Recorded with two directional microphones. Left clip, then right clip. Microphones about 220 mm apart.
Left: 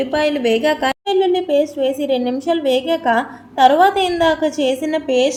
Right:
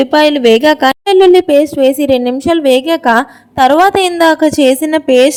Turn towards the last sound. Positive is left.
turn(degrees=-50)  # may be behind; listen again after turning